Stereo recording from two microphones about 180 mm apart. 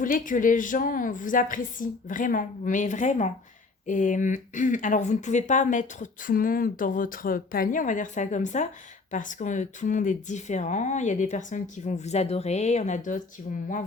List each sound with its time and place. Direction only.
0.0 s speech: 50° left (ahead or behind)